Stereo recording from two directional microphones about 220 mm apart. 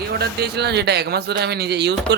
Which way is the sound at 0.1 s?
45° right (ahead or behind).